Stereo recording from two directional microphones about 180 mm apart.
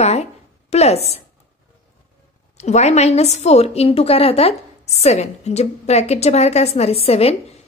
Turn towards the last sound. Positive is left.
turn(degrees=35)  # may be behind; listen again after turning